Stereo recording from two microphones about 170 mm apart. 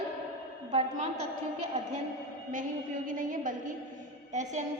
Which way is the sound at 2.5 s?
50° right (ahead or behind).